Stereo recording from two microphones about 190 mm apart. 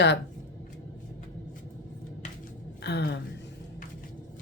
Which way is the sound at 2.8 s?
60° left (ahead or behind).